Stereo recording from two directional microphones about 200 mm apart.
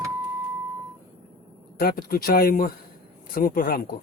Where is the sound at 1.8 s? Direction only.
50° left (ahead or behind).